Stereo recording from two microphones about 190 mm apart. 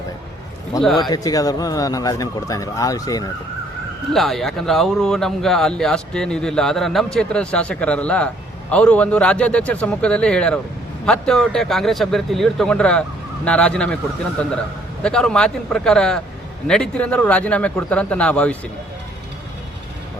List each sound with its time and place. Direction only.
0.7 s speech: 20° left (ahead or behind)
4.1 s speech: centre (ahead or behind)